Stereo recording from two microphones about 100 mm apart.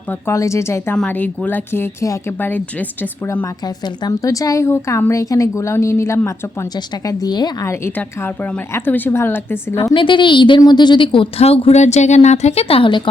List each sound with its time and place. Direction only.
0.3 s speech: 30° left (ahead or behind)
0.9 s speech: 15° left (ahead or behind); by 2.3 s 30° left (ahead or behind)
2.4 s a woman's voice: 15° left (ahead or behind)
3.4 s a woman's voice: 40° left (ahead or behind)
6.7 s speech: 40° left (ahead or behind)
7.6 s speech: 25° left (ahead or behind)
9.9 s a woman's voice: 55° left (ahead or behind)